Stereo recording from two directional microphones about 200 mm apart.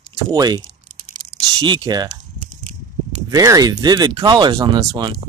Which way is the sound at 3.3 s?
20° right (ahead or behind).